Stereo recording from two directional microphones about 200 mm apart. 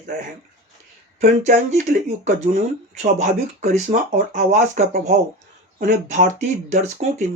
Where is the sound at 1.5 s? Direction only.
35° right (ahead or behind).